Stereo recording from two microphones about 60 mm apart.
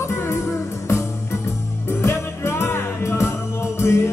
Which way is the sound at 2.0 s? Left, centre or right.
Left.